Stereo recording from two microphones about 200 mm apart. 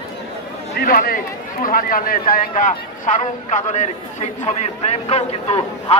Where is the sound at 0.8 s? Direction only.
50° left (ahead or behind).